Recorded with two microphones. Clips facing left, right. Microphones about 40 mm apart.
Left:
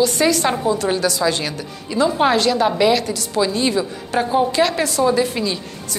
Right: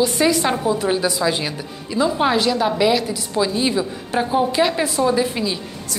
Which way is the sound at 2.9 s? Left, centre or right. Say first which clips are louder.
Left 1 dB; centre.